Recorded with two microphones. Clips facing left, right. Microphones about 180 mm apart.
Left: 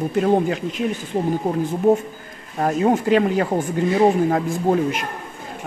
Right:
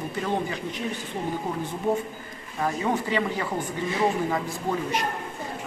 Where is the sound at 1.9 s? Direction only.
45° left (ahead or behind).